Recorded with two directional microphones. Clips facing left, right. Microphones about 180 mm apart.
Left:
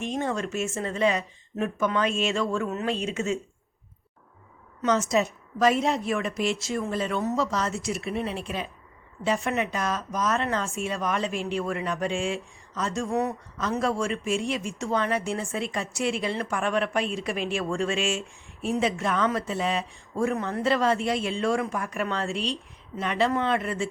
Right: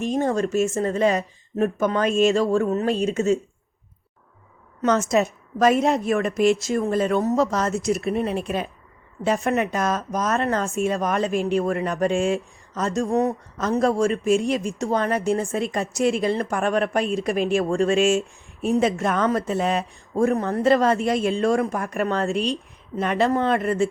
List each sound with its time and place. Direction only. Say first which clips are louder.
0.0 s speech: right 6 dB; 40° right (ahead or behind)
4.8 s speech: right 4 dB; 55° right (ahead or behind)